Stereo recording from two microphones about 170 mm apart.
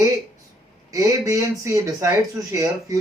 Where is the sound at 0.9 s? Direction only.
20° right (ahead or behind).